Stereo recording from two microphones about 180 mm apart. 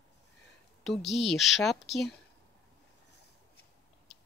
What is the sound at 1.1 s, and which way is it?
Speech, centre (ahead or behind).